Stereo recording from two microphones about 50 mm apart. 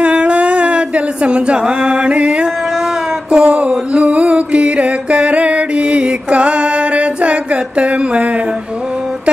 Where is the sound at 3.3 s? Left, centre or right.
Centre.